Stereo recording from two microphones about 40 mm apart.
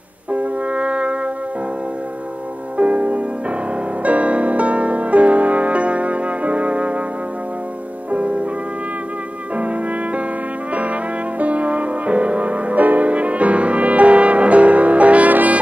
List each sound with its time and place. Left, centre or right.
0.3 s brass instrument: right
2.8 s music: right
8.1 s music: right
9.6 s music: right